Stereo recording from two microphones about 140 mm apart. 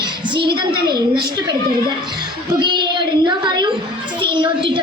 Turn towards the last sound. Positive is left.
turn(degrees=-35)  # may be behind; listen again after turning